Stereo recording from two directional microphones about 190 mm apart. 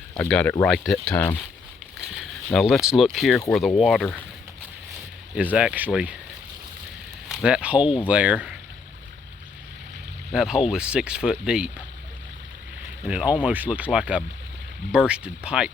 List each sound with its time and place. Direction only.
0.2 s speech: 5° left (ahead or behind)
2.0 s speech: centre (ahead or behind)
5.3 s speech: 5° right (ahead or behind)
7.3 s speech: 5° right (ahead or behind)
10.3 s speech: 5° right (ahead or behind)
13.1 s speech: 5° right (ahead or behind)